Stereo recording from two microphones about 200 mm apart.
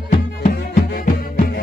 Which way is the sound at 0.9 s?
45° left (ahead or behind).